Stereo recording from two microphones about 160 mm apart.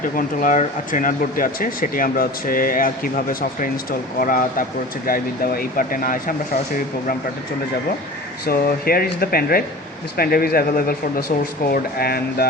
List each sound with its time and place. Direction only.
0.0 s speech: 55° left (ahead or behind)
8.4 s speech: 70° left (ahead or behind)